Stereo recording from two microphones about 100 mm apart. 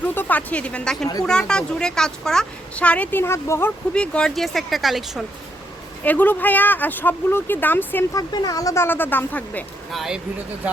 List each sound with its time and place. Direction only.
0.0 s speech: 20° left (ahead or behind)
3.9 s speech: 10° left (ahead or behind)
6.1 s speech: 15° left (ahead or behind)
8.1 s speech: 40° left (ahead or behind); by 9.6 s 15° left (ahead or behind)
9.9 s speech: centre (ahead or behind)